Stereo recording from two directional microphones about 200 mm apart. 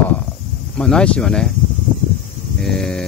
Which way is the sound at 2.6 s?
Centre (ahead or behind).